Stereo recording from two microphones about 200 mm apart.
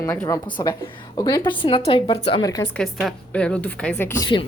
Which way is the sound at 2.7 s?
5° left (ahead or behind).